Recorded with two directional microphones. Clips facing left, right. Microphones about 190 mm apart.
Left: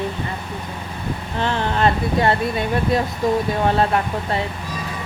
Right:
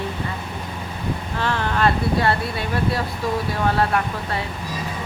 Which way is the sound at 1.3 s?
20° left (ahead or behind).